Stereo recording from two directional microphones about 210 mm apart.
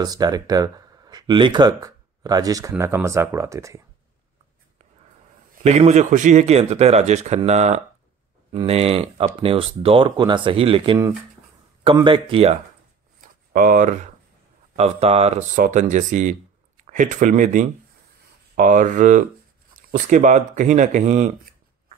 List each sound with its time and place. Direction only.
0.0 s speech: 20° right (ahead or behind)
5.6 s speech: 30° right (ahead or behind)
13.2 s a sound: 40° right (ahead or behind)
14.8 s speech: 30° right (ahead or behind)